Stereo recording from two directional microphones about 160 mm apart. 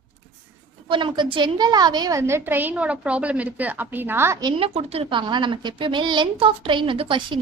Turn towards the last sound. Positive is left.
turn(degrees=-30)  # may be behind; listen again after turning